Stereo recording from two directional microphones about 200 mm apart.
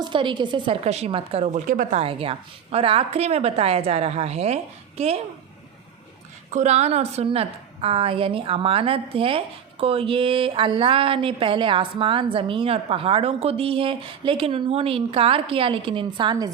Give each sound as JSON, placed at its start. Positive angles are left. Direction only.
{"t": 0.0, "sound": "a woman's voice", "side_deg": -25}
{"t": 6.5, "sound": "speech", "side_deg": -35}